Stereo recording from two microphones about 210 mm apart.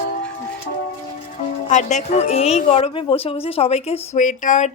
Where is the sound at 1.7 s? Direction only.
35° left (ahead or behind).